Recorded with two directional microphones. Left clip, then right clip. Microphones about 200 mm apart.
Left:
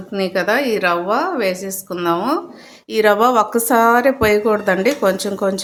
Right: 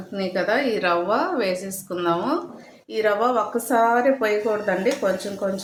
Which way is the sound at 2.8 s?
50° left (ahead or behind).